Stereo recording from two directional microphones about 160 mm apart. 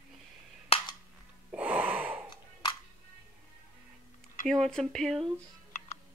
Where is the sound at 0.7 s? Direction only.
35° left (ahead or behind).